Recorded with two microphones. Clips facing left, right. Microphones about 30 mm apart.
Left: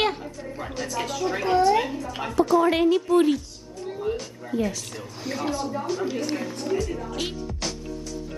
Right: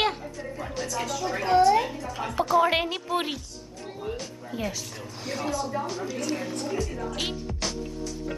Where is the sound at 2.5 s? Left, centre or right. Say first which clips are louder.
Left 3 dB; right.